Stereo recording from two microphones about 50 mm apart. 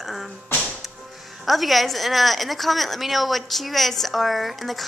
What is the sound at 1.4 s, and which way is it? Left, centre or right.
A woman's voice, centre.